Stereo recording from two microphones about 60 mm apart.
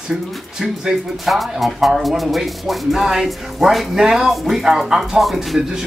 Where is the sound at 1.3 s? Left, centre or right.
Centre.